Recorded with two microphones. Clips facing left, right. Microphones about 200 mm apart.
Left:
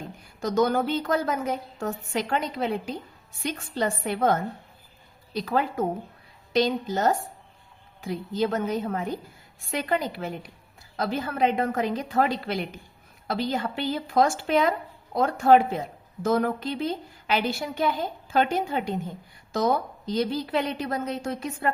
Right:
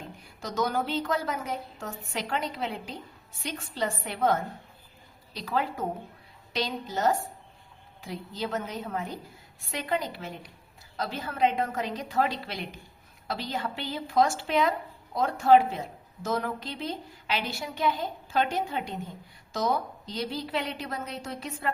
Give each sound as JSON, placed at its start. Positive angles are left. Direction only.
{"t": 0.4, "sound": "a woman's voice", "side_deg": 50}
{"t": 5.3, "sound": "a woman's voice", "side_deg": 50}